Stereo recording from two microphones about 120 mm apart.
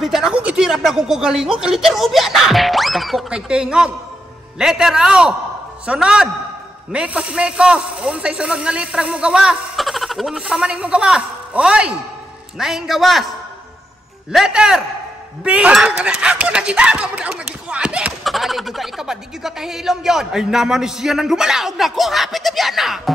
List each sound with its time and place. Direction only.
0.0 s a man's voice: 5° right (ahead or behind)
14.3 s speech: 5° right (ahead or behind)